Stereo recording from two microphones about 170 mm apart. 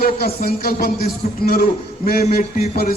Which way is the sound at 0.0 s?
65° left (ahead or behind).